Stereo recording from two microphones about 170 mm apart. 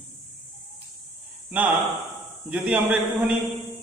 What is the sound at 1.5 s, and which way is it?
A man's voice, 10° right (ahead or behind).